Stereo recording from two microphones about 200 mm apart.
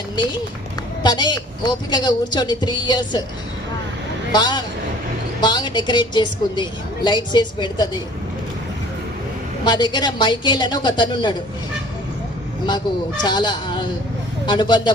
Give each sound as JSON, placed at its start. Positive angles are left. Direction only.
{"t": 1.0, "sound": "a woman's voice", "side_deg": 20}
{"t": 4.3, "sound": "a woman's voice", "side_deg": 20}
{"t": 9.6, "sound": "a woman's voice", "side_deg": 20}
{"t": 13.2, "sound": "a woman's voice", "side_deg": 20}